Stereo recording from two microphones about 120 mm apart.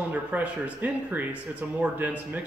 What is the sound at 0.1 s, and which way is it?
A man's voice, 10° right (ahead or behind).